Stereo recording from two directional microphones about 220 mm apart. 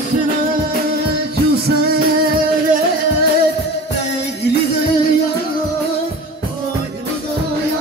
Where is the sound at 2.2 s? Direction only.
40° right (ahead or behind).